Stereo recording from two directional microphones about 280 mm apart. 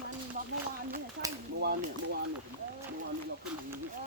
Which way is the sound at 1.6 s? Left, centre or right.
Right.